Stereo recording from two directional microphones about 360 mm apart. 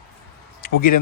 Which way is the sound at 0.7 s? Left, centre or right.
Left.